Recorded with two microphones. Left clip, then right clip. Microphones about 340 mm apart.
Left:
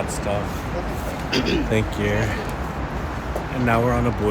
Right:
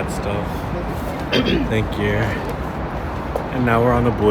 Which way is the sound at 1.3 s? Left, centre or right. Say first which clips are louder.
Right 4 dB; right.